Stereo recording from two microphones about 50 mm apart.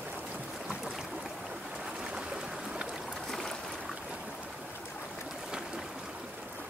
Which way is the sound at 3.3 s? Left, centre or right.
Centre.